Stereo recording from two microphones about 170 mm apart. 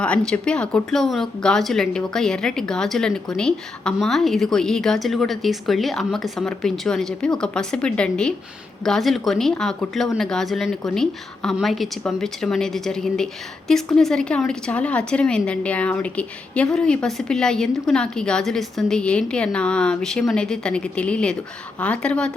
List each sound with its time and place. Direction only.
0.0 s a woman's voice: 5° left (ahead or behind)